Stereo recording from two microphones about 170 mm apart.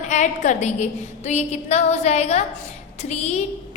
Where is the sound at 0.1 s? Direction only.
45° left (ahead or behind).